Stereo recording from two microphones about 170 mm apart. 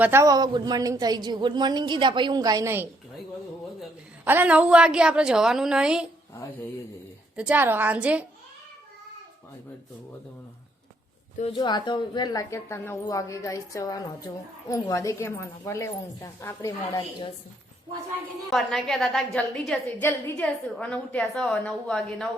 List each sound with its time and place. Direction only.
0.0 s a woman's voice: 15° right (ahead or behind)
4.3 s a woman's voice: 10° right (ahead or behind)
7.3 s a woman's voice: 10° right (ahead or behind)
11.5 s a woman's voice: 25° left (ahead or behind)
18.5 s a woman's voice: centre (ahead or behind)